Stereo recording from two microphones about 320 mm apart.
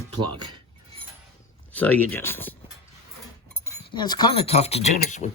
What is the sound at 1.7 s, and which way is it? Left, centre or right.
Speech, centre.